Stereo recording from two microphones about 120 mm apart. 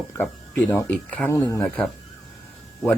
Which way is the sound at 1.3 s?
25° left (ahead or behind).